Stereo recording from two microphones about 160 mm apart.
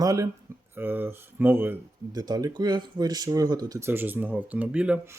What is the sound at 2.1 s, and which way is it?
Speech, 25° right (ahead or behind).